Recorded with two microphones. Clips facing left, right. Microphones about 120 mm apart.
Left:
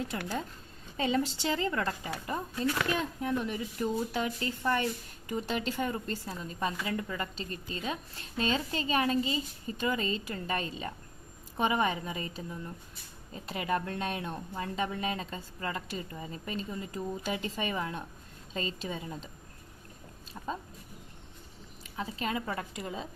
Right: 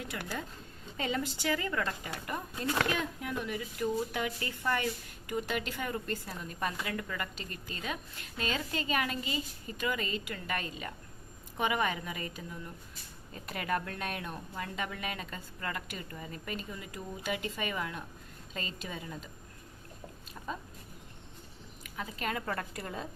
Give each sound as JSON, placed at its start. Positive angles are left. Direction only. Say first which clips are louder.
{"t": 0.1, "sound": "a woman's voice", "louder": "left 4 dB", "side_deg": 30}
{"t": 13.3, "sound": "a woman's voice", "louder": "left 2 dB", "side_deg": 25}
{"t": 21.8, "sound": "a woman's voice", "louder": "left 2 dB", "side_deg": 30}
{"t": 22.4, "sound": "a woman's voice", "louder": "left 1 dB", "side_deg": 15}